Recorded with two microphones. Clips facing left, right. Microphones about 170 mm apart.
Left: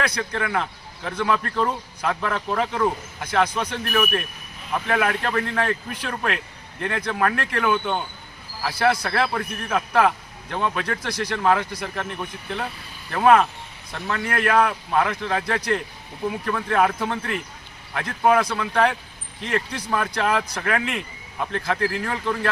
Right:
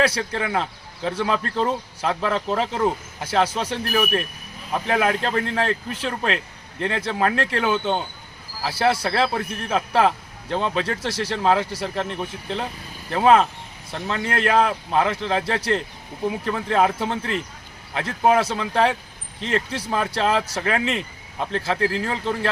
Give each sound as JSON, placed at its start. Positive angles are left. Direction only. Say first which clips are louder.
{"t": 0.0, "sound": "a man's voice", "louder": "right 4 dB", "side_deg": -30}